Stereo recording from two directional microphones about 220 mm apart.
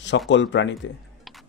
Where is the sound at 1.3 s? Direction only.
Centre (ahead or behind).